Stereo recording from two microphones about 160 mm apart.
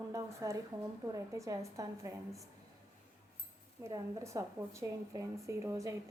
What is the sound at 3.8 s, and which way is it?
A woman's voice, 20° right (ahead or behind).